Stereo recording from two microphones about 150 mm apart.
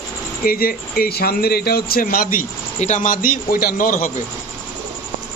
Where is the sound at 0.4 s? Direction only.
80° left.